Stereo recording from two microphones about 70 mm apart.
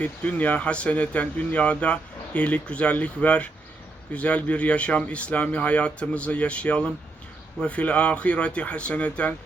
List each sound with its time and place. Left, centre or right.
0.0 s speech: centre